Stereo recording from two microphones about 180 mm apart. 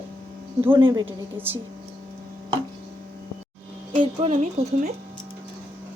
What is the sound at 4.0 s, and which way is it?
Speech, 35° right (ahead or behind).